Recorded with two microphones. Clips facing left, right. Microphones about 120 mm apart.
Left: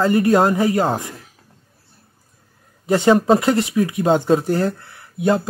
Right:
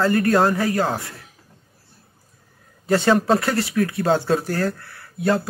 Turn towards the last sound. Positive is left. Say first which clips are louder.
# left 3 dB
turn(degrees=20)  # may be behind; listen again after turning